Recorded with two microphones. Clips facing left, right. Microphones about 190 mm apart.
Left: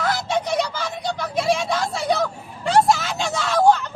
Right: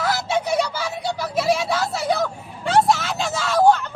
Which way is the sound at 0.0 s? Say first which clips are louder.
Even; 5° right (ahead or behind).